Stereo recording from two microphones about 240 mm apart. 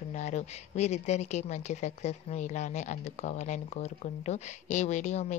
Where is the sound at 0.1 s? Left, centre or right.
Left.